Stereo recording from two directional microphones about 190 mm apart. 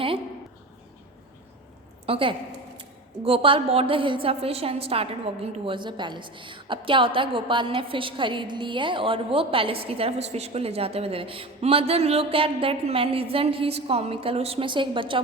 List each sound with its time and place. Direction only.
2.0 s a woman's voice: 30° right (ahead or behind)